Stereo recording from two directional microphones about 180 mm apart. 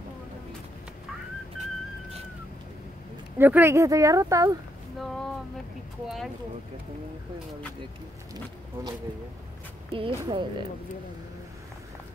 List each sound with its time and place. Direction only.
3.3 s speech: 10° right (ahead or behind)
4.9 s a sound: centre (ahead or behind)
6.0 s speech: centre (ahead or behind)
9.9 s speech: 30° right (ahead or behind)